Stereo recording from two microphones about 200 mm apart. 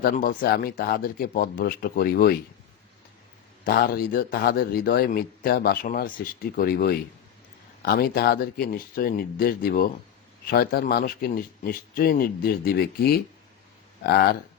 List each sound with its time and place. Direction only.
0.0 s a man's voice: 45° left (ahead or behind)
3.6 s a man's voice: 45° left (ahead or behind)